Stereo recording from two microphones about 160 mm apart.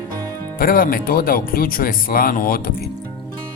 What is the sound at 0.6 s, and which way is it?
Speech, 65° left (ahead or behind).